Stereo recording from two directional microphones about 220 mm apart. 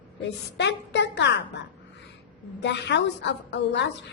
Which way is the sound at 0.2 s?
50° left (ahead or behind).